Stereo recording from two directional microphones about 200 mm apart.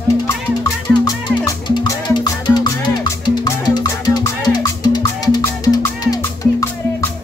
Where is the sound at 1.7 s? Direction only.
20° left (ahead or behind).